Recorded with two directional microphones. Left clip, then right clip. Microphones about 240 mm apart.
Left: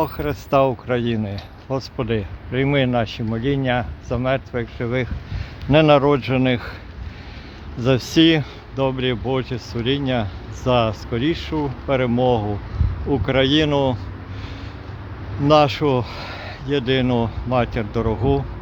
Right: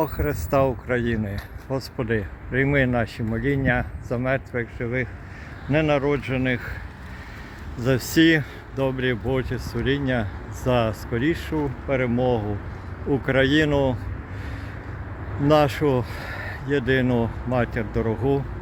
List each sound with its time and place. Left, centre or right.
0.2 s speech: centre
7.9 s speech: left
15.4 s speech: centre